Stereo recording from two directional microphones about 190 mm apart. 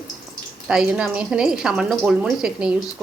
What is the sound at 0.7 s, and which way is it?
A woman's voice, 5° right (ahead or behind).